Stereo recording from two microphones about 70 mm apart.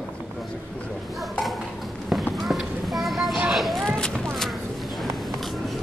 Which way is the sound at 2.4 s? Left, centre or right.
Centre.